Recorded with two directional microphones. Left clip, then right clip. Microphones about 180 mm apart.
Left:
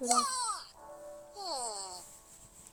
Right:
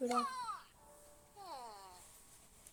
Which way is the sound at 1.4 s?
30° left (ahead or behind).